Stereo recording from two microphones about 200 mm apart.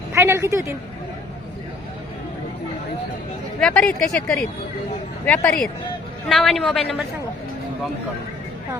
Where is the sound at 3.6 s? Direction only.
5° left (ahead or behind).